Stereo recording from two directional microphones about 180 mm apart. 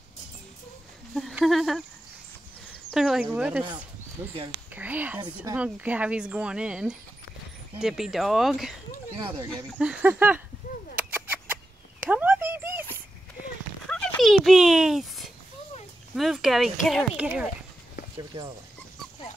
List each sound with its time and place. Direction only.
1.1 s a sound: centre (ahead or behind)
2.9 s a woman's voice: centre (ahead or behind)
5.2 s speech: 20° right (ahead or behind)
5.6 s speech: 5° right (ahead or behind)
9.2 s speech: 20° right (ahead or behind)
9.8 s speech: 5° right (ahead or behind)
11.0 s a sound: 10° right (ahead or behind)
13.8 s a sound: 5° left (ahead or behind)
16.2 s speech: centre (ahead or behind)
18.1 s speech: 25° right (ahead or behind)